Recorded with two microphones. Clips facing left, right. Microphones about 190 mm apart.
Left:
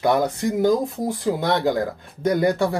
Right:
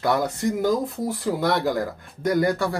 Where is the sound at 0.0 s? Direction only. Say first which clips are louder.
Left 3 dB; 20° left (ahead or behind).